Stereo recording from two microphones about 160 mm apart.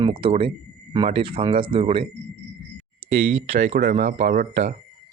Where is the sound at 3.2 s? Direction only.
40° right (ahead or behind).